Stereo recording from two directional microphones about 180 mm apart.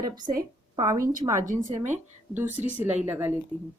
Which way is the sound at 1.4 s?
45° right (ahead or behind).